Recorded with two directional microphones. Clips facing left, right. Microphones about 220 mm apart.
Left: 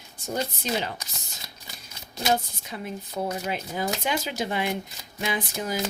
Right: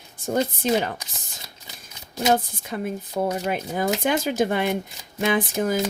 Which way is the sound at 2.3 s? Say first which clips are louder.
Right 4 dB; 50° right (ahead or behind).